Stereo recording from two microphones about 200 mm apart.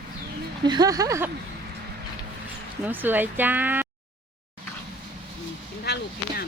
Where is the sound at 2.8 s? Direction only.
10° right (ahead or behind).